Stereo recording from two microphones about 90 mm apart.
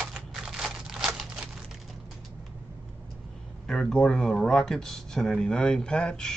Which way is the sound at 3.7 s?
5° left (ahead or behind).